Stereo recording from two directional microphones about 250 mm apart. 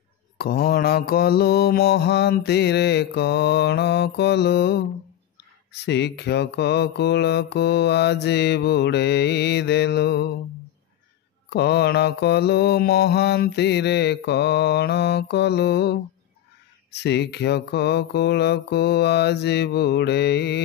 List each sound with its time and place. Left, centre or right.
0.4 s mantra: left
11.5 s mantra: left